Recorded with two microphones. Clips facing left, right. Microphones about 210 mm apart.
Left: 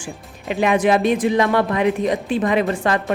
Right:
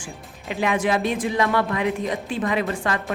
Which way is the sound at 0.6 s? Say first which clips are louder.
Left 5 dB; 20° left (ahead or behind).